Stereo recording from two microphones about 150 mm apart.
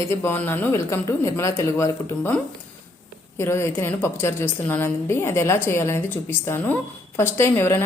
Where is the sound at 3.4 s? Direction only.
15° left (ahead or behind).